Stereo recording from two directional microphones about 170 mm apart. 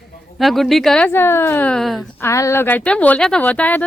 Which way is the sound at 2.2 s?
15° left (ahead or behind).